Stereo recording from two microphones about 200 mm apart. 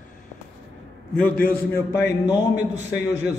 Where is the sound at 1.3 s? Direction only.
45° left (ahead or behind).